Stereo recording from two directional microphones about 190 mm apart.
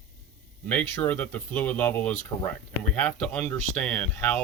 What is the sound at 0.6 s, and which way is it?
Speech, 10° left (ahead or behind).